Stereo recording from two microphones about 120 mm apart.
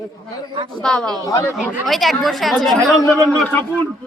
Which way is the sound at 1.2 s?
25° left (ahead or behind).